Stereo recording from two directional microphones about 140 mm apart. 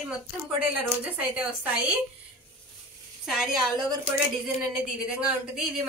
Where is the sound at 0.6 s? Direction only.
10° right (ahead or behind).